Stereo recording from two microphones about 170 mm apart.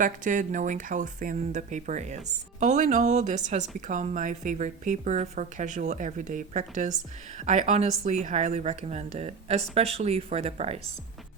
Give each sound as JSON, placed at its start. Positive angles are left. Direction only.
{"t": 0.0, "sound": "speech", "side_deg": -50}